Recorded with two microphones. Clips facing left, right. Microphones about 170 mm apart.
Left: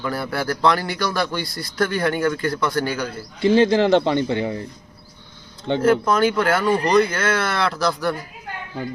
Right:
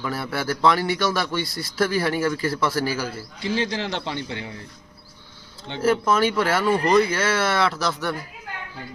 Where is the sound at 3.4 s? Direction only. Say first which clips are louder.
Left 10 dB; 55° left (ahead or behind).